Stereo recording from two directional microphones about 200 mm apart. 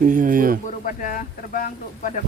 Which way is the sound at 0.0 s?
40° right (ahead or behind).